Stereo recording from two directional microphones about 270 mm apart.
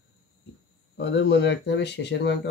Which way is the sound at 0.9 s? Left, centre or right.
Left.